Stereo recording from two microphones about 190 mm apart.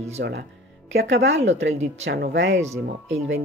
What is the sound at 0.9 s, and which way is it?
Speech, 80° right.